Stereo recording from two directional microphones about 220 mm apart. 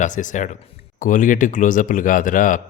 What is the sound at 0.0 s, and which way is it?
Speech, 35° left (ahead or behind).